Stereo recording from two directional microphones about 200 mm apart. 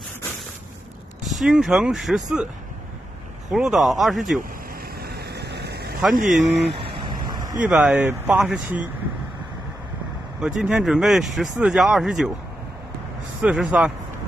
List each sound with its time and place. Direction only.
1.2 s speech: centre (ahead or behind)
3.5 s speech: centre (ahead or behind)
5.0 s vehicle: 55° right (ahead or behind)
6.1 s speech: 40° right (ahead or behind)
6.8 s vehicle: 25° right (ahead or behind)
7.6 s speech: 5° right (ahead or behind)
10.4 s speech: 5° right (ahead or behind)
13.4 s speech: 5° right (ahead or behind)